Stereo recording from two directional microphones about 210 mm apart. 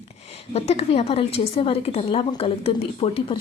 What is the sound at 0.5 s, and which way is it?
A woman's voice, 30° left (ahead or behind).